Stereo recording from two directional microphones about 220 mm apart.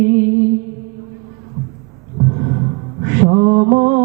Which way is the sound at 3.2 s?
25° right (ahead or behind).